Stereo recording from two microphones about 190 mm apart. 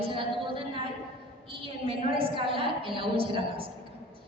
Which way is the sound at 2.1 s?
30° right (ahead or behind).